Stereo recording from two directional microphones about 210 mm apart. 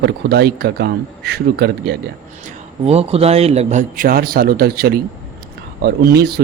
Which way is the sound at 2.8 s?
30° right (ahead or behind).